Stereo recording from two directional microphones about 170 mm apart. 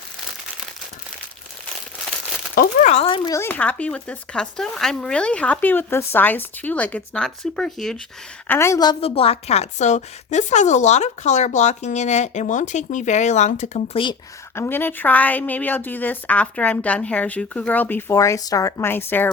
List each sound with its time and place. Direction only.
2.6 s speech: 45° left (ahead or behind)
3.2 s a woman's voice: 15° left (ahead or behind)
8.4 s a woman's voice: 15° left (ahead or behind); by 14.0 s 40° left (ahead or behind)
14.5 s a woman's voice: 15° left (ahead or behind)